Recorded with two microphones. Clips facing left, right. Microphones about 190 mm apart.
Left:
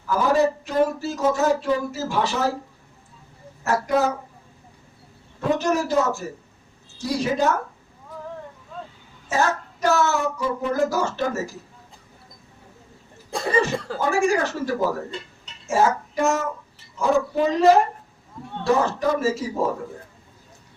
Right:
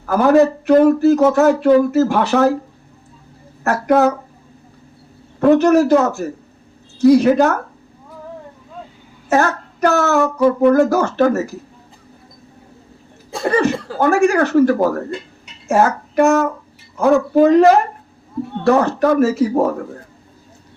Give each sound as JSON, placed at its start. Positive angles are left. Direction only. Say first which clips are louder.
{"t": 0.0, "sound": "speech", "louder": "right 7 dB", "side_deg": -60}
{"t": 3.6, "sound": "speech", "louder": "right 7 dB", "side_deg": -60}
{"t": 5.4, "sound": "speech", "louder": "right 11 dB", "side_deg": -60}
{"t": 9.3, "sound": "speech", "louder": "right 6 dB", "side_deg": -60}
{"t": 13.4, "sound": "speech", "louder": "right 6 dB", "side_deg": -60}
{"t": 13.7, "sound": "speech", "louder": "right 1 dB", "side_deg": 0}
{"t": 14.0, "sound": "speech", "louder": "right 8 dB", "side_deg": -60}
{"t": 15.6, "sound": "a sound", "louder": "right 5 dB", "side_deg": -60}
{"t": 16.9, "sound": "speech", "louder": "right 8 dB", "side_deg": -60}